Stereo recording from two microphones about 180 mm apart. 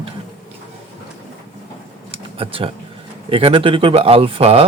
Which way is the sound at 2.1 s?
30° right (ahead or behind).